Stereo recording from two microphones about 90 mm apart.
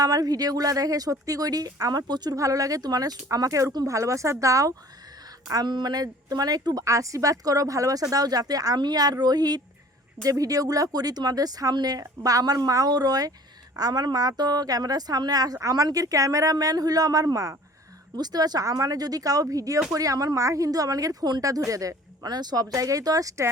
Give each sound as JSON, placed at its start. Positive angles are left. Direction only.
{"t": 0.0, "sound": "speech", "side_deg": -45}
{"t": 5.5, "sound": "speech", "side_deg": -50}